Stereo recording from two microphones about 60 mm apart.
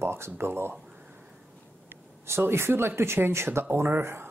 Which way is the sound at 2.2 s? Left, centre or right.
Right.